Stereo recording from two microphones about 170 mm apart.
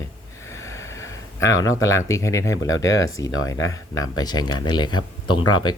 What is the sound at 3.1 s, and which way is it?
Speech, 20° left (ahead or behind).